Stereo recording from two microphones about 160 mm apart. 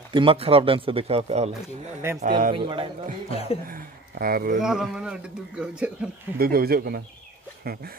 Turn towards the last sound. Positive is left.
turn(degrees=-70)  # may be behind; listen again after turning